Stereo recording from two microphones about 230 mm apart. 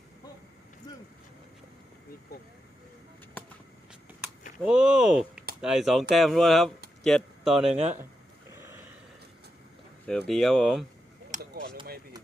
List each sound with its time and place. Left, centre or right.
0.9 s vehicle: centre
3.4 s vehicle: centre
4.6 s speech: centre
8.5 s a sound: centre
10.1 s speech: centre
11.3 s a sound: right